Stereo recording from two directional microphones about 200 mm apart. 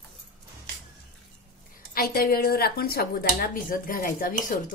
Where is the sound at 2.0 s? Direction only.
50° left (ahead or behind).